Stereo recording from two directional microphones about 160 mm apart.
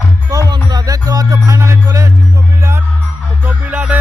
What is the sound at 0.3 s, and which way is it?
Music, 20° right (ahead or behind).